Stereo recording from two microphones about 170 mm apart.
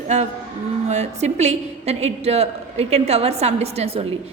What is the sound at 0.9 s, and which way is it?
A woman's voice, 40° right (ahead or behind).